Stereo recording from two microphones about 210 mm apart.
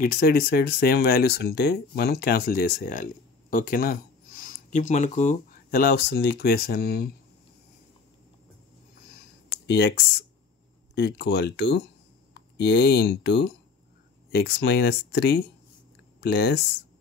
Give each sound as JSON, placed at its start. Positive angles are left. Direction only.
{"t": 0.0, "sound": "speech", "side_deg": 45}
{"t": 9.7, "sound": "speech", "side_deg": 55}